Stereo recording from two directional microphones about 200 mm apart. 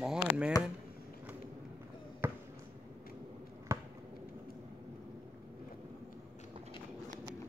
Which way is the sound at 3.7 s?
15° right (ahead or behind).